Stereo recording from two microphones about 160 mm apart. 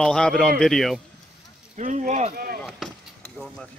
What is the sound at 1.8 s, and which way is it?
Speech, 55° right (ahead or behind).